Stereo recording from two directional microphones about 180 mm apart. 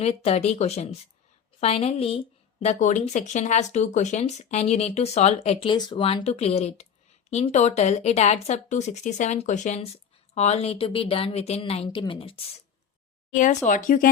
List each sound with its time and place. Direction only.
0.0 s speech: 35° left (ahead or behind)
13.3 s speech: 45° left (ahead or behind)